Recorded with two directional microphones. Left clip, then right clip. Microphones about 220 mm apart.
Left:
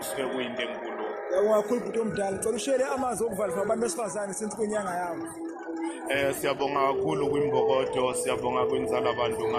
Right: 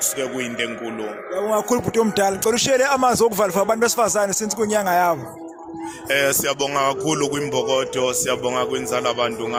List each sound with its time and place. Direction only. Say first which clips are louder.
0.2 s speech: right 3 dB; 50° right (ahead or behind)